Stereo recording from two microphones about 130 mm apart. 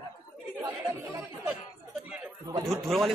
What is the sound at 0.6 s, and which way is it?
Chatter, 15° right (ahead or behind).